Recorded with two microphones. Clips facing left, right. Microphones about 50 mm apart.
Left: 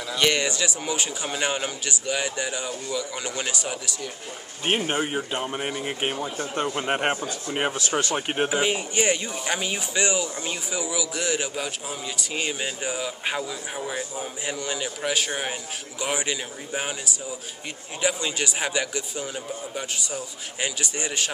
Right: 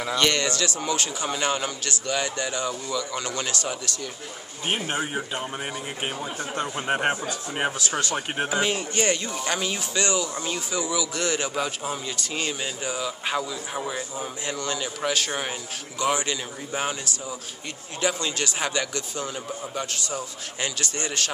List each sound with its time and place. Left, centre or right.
0.1 s a man's voice: centre
4.6 s speech: left
5.9 s speech: left
6.7 s speech: centre
8.5 s a man's voice: centre
12.4 s a man's voice: centre